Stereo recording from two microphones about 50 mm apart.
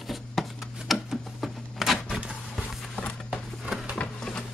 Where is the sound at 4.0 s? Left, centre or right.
Left.